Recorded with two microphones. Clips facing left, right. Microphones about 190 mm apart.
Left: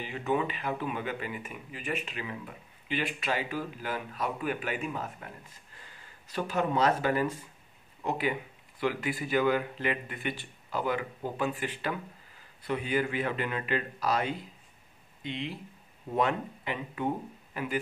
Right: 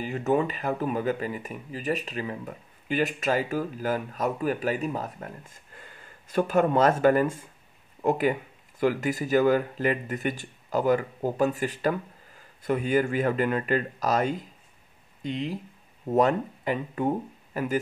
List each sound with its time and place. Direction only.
0.0 s speech: 45° right (ahead or behind)